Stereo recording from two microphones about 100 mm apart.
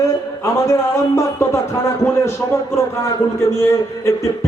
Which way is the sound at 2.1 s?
30° left (ahead or behind).